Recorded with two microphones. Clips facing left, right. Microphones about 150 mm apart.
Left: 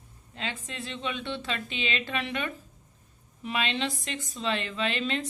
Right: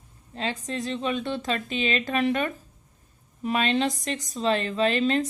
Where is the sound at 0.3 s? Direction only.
40° right (ahead or behind).